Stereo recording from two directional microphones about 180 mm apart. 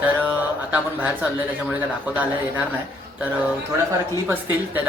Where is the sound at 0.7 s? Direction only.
10° right (ahead or behind).